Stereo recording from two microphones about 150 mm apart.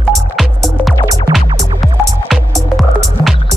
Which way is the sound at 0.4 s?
Centre (ahead or behind).